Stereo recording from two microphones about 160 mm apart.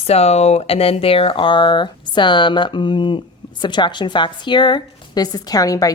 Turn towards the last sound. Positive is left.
turn(degrees=20)  # may be behind; listen again after turning